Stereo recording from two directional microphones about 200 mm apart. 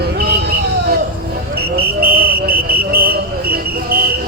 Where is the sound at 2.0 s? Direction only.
50° right (ahead or behind).